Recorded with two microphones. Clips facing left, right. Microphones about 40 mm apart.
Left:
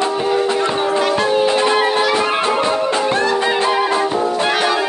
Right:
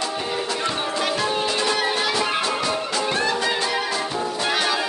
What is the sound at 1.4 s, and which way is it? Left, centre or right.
Music, left.